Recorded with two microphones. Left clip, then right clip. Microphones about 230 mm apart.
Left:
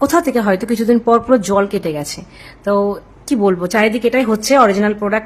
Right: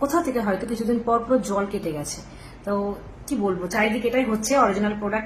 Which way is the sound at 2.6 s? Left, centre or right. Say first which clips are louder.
Left 11 dB; left.